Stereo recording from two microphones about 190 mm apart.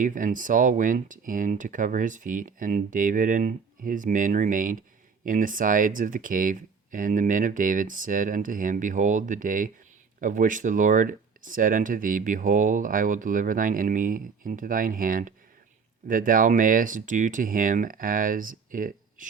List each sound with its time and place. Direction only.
0.0 s speech: 45° right (ahead or behind)